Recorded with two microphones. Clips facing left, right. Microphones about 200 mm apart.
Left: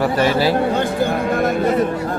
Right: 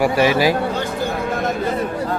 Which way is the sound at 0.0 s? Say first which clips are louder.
Right 1 dB; 10° right (ahead or behind).